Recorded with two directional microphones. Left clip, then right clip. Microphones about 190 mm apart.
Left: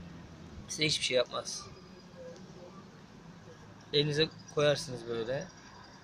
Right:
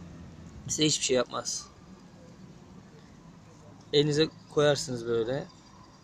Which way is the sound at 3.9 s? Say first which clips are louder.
Right 4 dB; 40° right (ahead or behind).